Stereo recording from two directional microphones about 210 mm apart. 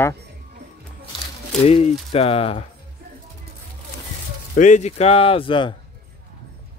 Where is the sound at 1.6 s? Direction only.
30° left (ahead or behind).